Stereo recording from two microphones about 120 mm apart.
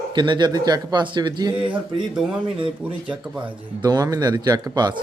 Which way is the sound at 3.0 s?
10° right (ahead or behind).